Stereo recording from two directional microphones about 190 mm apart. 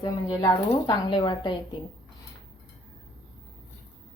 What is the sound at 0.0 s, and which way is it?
Speech, 25° left (ahead or behind).